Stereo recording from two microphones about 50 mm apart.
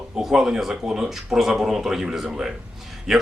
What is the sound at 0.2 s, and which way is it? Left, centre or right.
Speech, centre.